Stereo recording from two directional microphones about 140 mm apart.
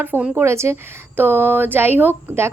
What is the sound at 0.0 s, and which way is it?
A woman's voice, 15° right (ahead or behind).